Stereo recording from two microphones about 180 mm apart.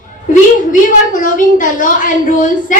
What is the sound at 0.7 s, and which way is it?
A woman's voice, 45° left (ahead or behind).